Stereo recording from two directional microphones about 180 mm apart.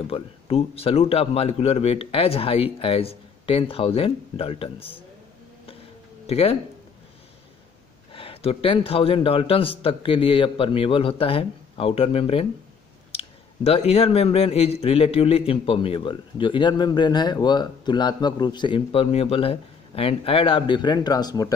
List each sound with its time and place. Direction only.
0.1 s speech: 30° left (ahead or behind)
6.2 s speech: 35° left (ahead or behind)
8.1 s a man's voice: 30° left (ahead or behind)